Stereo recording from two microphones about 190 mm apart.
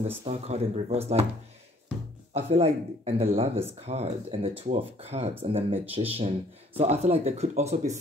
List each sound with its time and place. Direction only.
0.2 s speech: 35° right (ahead or behind)
2.3 s speech: 30° right (ahead or behind)